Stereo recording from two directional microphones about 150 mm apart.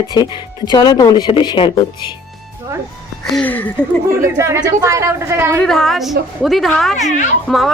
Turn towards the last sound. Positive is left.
turn(degrees=0)  # may be behind; listen again after turning